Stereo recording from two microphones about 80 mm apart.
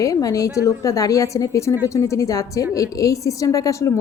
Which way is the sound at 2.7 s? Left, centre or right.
Left.